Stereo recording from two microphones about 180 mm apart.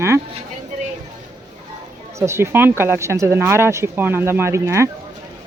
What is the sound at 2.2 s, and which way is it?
Speech, 10° right (ahead or behind).